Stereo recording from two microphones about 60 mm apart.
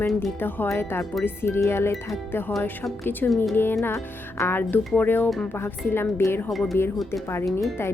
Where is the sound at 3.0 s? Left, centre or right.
Left.